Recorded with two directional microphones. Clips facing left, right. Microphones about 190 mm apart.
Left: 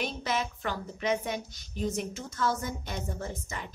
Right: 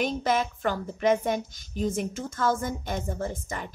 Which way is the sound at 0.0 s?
50° right (ahead or behind).